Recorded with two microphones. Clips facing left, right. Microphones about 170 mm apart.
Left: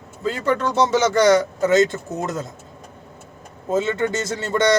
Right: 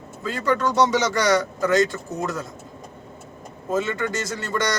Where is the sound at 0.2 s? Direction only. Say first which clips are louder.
Left 2 dB; 25° left (ahead or behind).